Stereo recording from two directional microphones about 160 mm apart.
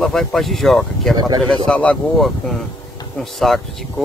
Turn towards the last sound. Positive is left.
turn(degrees=0)  # may be behind; listen again after turning